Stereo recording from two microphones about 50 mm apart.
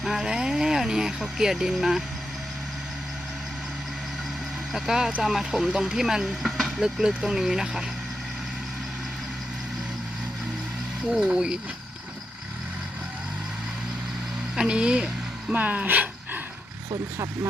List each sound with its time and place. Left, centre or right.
0.0 s speech: centre
4.7 s speech: centre
7.3 s speech: centre
11.1 s speech: centre
14.5 s speech: centre
15.5 s speech: right